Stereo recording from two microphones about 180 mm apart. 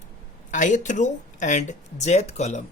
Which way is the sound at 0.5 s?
45° left (ahead or behind).